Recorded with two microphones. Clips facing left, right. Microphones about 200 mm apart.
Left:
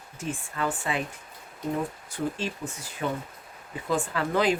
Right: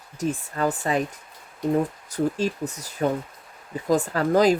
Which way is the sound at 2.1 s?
40° right (ahead or behind).